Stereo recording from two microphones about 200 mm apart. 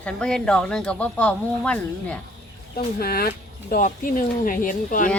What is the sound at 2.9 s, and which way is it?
Speech, 50° left (ahead or behind).